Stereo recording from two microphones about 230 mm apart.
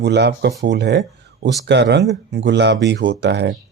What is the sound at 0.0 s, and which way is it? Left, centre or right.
Speech, right.